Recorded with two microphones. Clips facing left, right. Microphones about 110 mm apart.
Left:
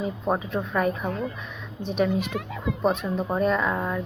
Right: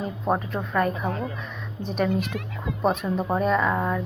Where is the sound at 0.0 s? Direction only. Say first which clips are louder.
Even; centre (ahead or behind).